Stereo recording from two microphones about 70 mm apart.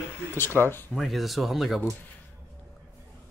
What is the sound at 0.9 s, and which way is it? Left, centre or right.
Speech, centre.